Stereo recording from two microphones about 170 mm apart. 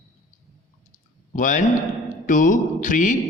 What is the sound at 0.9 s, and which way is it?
Clicking, 50° left (ahead or behind).